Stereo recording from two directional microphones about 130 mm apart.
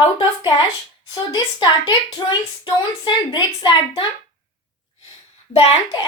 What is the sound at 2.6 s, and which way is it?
A woman's voice, 35° left (ahead or behind).